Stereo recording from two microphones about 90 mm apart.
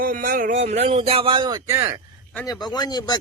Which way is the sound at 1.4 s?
50° right (ahead or behind).